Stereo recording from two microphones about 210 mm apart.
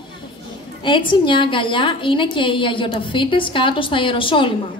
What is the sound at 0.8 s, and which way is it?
A woman's voice, 25° left (ahead or behind).